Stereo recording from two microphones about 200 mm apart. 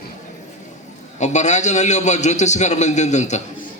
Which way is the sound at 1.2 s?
35° left (ahead or behind).